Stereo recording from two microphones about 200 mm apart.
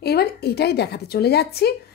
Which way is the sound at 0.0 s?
50° left (ahead or behind).